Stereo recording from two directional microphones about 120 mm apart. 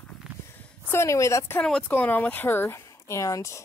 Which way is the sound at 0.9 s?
25° left (ahead or behind).